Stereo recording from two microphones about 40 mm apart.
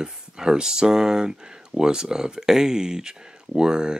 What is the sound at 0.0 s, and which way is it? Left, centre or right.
Speech, centre.